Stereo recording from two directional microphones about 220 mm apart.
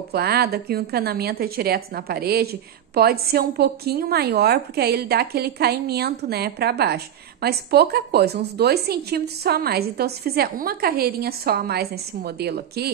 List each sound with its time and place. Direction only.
0.1 s a woman's voice: 45° right (ahead or behind)